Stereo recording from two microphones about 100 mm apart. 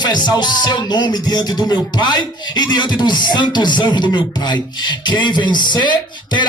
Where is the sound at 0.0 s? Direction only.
45° left (ahead or behind).